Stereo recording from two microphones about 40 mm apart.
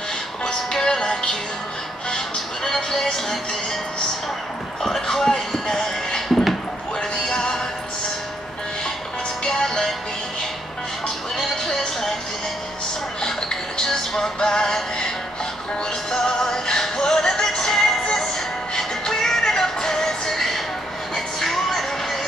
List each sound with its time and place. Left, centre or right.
0.5 s music: centre
4.8 s basketball bounce: centre
6.2 s a sound: centre
7.0 s music: centre
9.4 s music: centre
11.3 s music: centre
13.2 s music: centre
16.1 s music: centre